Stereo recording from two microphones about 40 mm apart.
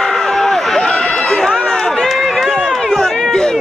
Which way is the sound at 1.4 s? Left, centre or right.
Centre.